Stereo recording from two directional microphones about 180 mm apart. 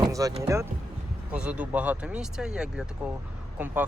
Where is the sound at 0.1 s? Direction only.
20° right (ahead or behind).